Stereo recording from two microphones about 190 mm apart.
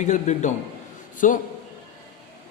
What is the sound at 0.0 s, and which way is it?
A man's voice, 40° left (ahead or behind).